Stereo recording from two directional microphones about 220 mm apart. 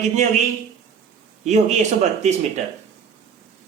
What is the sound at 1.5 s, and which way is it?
Speech, 30° right (ahead or behind).